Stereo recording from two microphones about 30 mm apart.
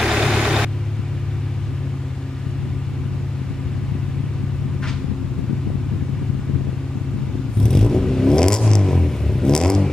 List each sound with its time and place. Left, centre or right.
0.0 s vehicle: centre
7.6 s vehicle: centre